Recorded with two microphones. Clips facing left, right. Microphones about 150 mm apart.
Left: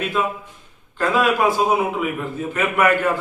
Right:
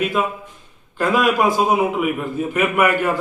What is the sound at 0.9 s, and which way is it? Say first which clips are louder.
A man's voice: right 1 dB; 15° right (ahead or behind).